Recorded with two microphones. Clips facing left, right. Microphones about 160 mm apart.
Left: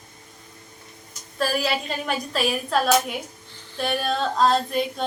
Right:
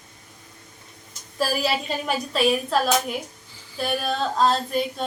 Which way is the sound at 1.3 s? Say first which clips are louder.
Even; 5° right (ahead or behind).